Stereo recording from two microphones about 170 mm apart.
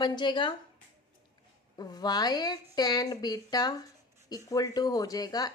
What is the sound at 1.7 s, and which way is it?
A woman's voice, 25° left (ahead or behind).